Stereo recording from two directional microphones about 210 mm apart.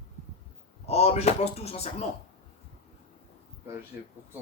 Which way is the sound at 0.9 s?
30° left (ahead or behind).